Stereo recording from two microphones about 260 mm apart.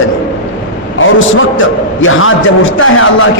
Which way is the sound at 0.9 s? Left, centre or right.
Left.